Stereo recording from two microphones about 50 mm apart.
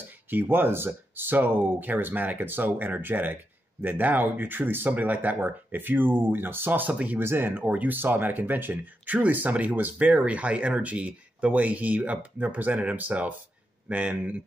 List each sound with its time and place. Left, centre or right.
0.3 s speech: right
6.9 s speech: right
7.2 s speech: right
7.6 s speech: right